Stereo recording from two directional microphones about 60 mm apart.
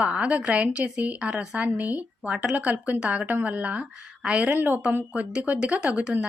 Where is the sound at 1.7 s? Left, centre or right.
Right.